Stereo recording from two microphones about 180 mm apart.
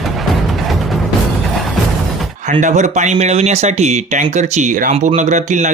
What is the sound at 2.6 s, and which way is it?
Speech, 40° right (ahead or behind).